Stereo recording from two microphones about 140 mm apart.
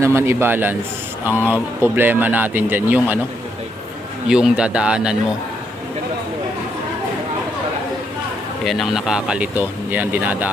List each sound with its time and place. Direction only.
0.0 s speech: 20° right (ahead or behind)
4.3 s speech: 5° right (ahead or behind)
8.6 s speech: centre (ahead or behind)